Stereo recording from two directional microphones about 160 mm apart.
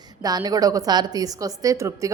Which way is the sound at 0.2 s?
25° right (ahead or behind).